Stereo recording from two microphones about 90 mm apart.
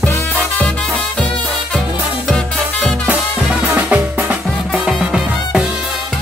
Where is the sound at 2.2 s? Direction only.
10° left (ahead or behind).